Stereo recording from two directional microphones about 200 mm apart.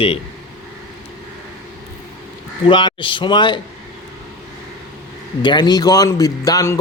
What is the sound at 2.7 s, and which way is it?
Speech, 25° left (ahead or behind).